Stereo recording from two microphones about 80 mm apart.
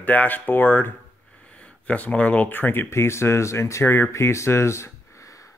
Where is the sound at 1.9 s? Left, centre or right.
Centre; by 4.8 s left.